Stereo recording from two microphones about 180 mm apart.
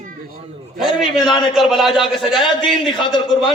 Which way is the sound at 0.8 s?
Centre (ahead or behind).